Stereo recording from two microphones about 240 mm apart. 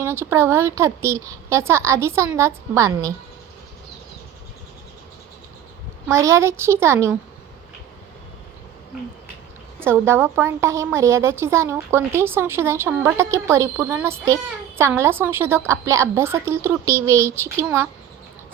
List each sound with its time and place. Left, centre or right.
0.0 s a woman's voice: centre
6.1 s a woman's voice: centre
9.8 s a woman's voice: centre